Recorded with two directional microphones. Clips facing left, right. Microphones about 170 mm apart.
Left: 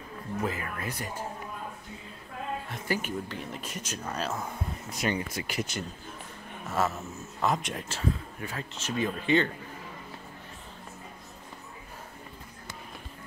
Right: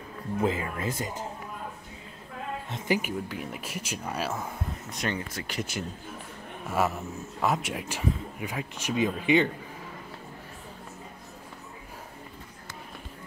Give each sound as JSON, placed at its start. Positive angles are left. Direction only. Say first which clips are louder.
{"t": 0.4, "sound": "speech", "louder": "right 5 dB", "side_deg": -25}
{"t": 2.7, "sound": "speech", "louder": "right 5 dB", "side_deg": -15}
{"t": 6.7, "sound": "speech", "louder": "right 2 dB", "side_deg": -10}